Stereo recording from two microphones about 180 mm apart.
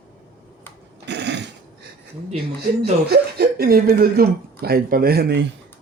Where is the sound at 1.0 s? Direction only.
75° right (ahead or behind).